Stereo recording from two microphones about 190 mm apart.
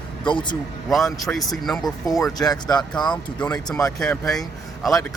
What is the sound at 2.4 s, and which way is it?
Speech, 20° left (ahead or behind).